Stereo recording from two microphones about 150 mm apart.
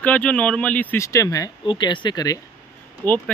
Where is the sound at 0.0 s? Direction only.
10° left (ahead or behind); by 2.4 s 25° left (ahead or behind).